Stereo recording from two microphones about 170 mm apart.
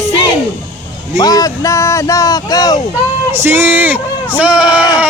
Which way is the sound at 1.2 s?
20° left (ahead or behind).